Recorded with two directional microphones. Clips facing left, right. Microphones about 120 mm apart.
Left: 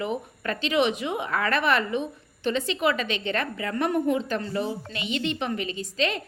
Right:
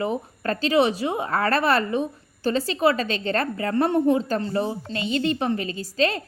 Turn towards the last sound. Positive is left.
turn(degrees=-35)  # may be behind; listen again after turning